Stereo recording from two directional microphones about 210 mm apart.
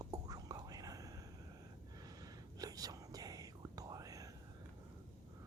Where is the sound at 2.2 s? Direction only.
15° right (ahead or behind).